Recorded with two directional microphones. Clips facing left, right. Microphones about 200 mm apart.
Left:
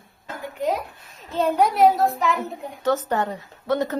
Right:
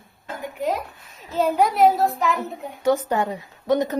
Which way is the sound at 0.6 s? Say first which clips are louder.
Left 1 dB; centre (ahead or behind).